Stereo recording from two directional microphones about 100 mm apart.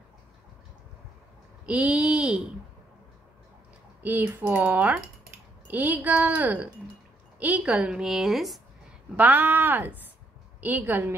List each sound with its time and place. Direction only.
1.7 s speech: 10° right (ahead or behind)
4.0 s a woman's voice: 20° right (ahead or behind); by 8.5 s centre (ahead or behind)
9.1 s a woman's voice: 15° right (ahead or behind)